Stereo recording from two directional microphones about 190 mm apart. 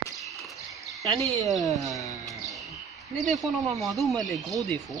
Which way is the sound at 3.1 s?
Centre (ahead or behind).